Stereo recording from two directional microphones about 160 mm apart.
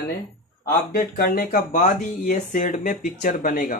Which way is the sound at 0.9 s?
65° left (ahead or behind).